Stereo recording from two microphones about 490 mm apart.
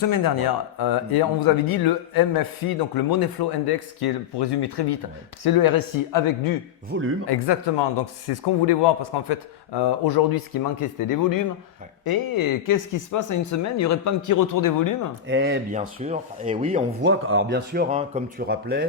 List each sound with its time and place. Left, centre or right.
0.0 s speech: left
6.9 s speech: right
7.3 s speech: left
15.3 s speech: right